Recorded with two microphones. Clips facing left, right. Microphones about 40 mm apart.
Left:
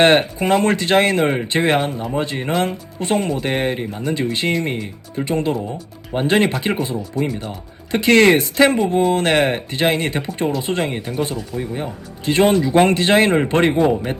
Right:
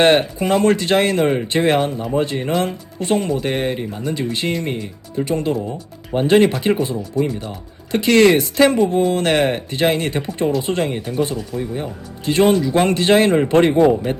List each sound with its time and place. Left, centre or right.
0.0 s speech: left
3.2 s speech: left
8.8 s speech: left
9.1 s speech: left
10.9 s speech: centre
12.2 s speech: left